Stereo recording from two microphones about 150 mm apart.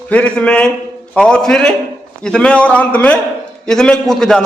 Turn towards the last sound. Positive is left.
turn(degrees=5)  # may be behind; listen again after turning